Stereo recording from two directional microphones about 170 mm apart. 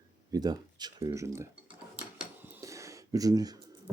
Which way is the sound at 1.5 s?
5° right (ahead or behind).